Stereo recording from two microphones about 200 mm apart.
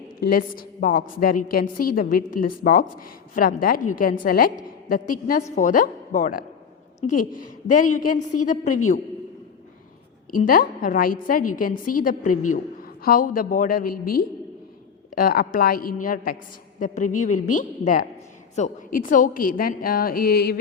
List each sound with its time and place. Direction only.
0.2 s a woman's voice: 45° left (ahead or behind)
10.3 s a woman's voice: 45° left (ahead or behind)